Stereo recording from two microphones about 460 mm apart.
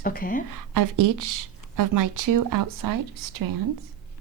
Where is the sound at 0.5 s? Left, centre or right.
Right.